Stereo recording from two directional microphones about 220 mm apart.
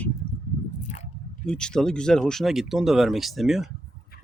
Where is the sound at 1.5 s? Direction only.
5° left (ahead or behind).